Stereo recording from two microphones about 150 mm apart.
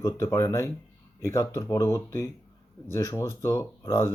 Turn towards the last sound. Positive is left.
turn(degrees=20)  # may be behind; listen again after turning